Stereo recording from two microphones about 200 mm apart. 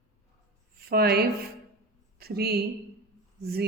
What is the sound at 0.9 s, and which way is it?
Speech, 50° right (ahead or behind).